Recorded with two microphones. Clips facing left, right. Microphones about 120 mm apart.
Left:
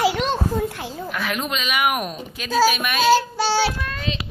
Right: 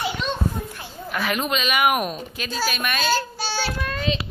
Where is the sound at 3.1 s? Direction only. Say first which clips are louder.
Left 7 dB; 80° left.